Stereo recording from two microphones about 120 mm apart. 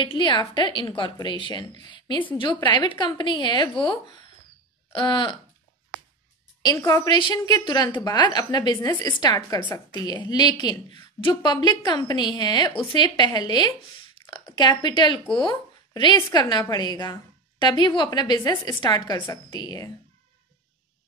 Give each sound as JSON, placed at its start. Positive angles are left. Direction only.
{"t": 0.0, "sound": "a woman's voice", "side_deg": 40}
{"t": 4.9, "sound": "a woman's voice", "side_deg": 40}
{"t": 6.6, "sound": "a woman's voice", "side_deg": 30}
{"t": 19.1, "sound": "a woman's voice", "side_deg": 20}
{"t": 19.5, "sound": "a woman's voice", "side_deg": 35}